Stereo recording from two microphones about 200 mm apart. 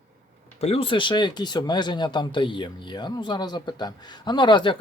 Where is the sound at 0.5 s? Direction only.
30° left (ahead or behind).